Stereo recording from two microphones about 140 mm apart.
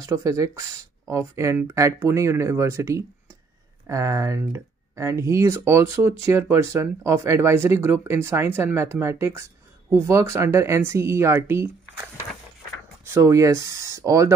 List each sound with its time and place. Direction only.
0.0 s speech: 20° right (ahead or behind)
13.1 s speech: 20° right (ahead or behind)